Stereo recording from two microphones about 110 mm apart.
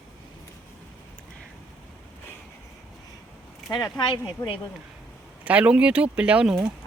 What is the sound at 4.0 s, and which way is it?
Speech, 50° left (ahead or behind).